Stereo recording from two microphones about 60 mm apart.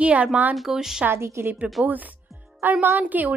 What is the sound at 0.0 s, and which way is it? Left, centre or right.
Speech, right.